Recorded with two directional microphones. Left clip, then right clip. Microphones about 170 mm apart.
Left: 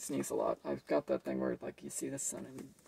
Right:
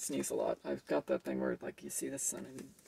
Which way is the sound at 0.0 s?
15° right (ahead or behind).